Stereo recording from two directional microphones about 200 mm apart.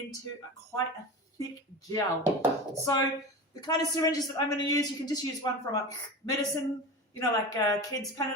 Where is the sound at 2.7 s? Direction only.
20° left (ahead or behind).